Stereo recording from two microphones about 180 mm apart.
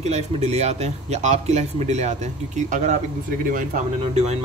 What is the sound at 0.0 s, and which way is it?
Speech, 35° right (ahead or behind).